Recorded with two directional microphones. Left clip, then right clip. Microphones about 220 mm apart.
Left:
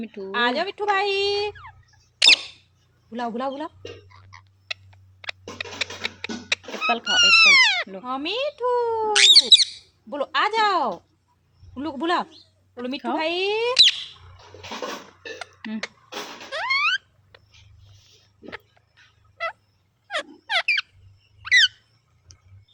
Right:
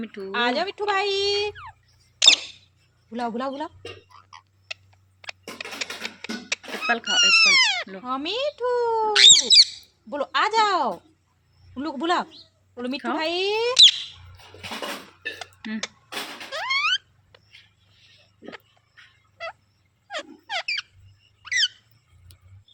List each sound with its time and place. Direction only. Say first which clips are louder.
0.0 s speech: left 1 dB; 10° left (ahead or behind)
2.1 s rodents: left 1 dB; 10° left (ahead or behind)
3.1 s speech: left 1 dB; centre (ahead or behind)
4.1 s frog: right 2 dB; centre (ahead or behind)
4.7 s a sound: left 4 dB; 15° left (ahead or behind)
6.8 s speech: left 2 dB; 15° left (ahead or behind)
8.0 s speech: even; centre (ahead or behind)
15.4 s a sound: even; 10° left (ahead or behind)
20.1 s a sound: left 5 dB; 20° left (ahead or behind)
21.4 s squeak: left 7 dB; 20° left (ahead or behind)